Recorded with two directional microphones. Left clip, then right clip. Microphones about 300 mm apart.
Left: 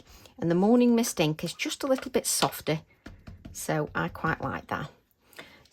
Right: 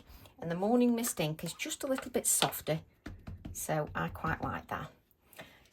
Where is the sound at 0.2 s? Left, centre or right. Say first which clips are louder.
Left 9 dB; left.